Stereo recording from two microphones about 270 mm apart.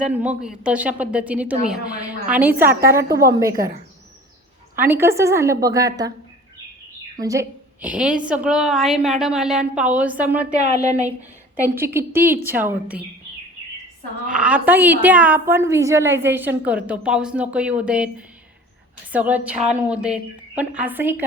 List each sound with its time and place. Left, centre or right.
0.0 s a woman's voice: centre
3.5 s speech: right
4.8 s a woman's voice: centre
7.2 s a woman's voice: centre
10.6 s a woman's voice: right
11.7 s a woman's voice: centre
14.3 s a woman's voice: centre
19.1 s a woman's voice: centre